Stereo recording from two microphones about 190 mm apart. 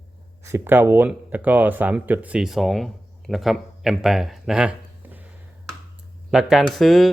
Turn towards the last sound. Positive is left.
turn(degrees=0)  # may be behind; listen again after turning